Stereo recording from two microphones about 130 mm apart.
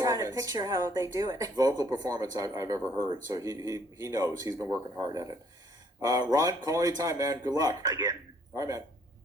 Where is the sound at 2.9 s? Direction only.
35° right (ahead or behind).